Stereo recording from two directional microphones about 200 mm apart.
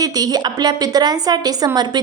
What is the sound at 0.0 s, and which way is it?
A woman's voice, 20° right (ahead or behind).